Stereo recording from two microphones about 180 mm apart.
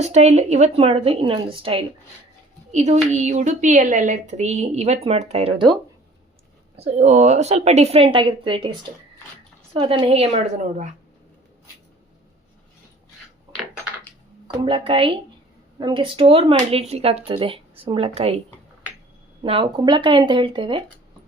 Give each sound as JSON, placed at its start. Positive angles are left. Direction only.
{"t": 0.0, "sound": "a woman's voice", "side_deg": -40}
{"t": 14.4, "sound": "a woman's voice", "side_deg": -30}
{"t": 19.4, "sound": "speech", "side_deg": -30}